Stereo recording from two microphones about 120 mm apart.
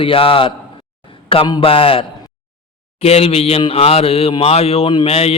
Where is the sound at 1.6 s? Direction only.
50° left (ahead or behind).